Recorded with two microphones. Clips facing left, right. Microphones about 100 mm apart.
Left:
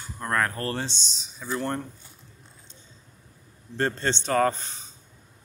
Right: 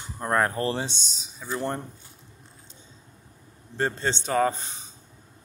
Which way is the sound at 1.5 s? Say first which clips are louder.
Even; 20° right (ahead or behind).